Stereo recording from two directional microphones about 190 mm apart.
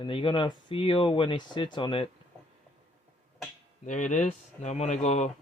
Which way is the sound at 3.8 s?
40° left (ahead or behind).